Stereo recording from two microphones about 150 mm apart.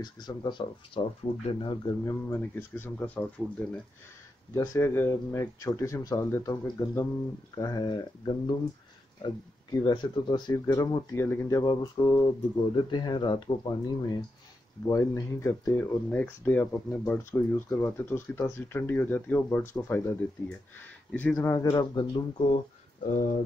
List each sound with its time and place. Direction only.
0.0 s speech: 30° left (ahead or behind)
2.0 s speech: 15° left (ahead or behind)
21.4 s speech: 20° left (ahead or behind)
23.0 s speech: 60° left (ahead or behind)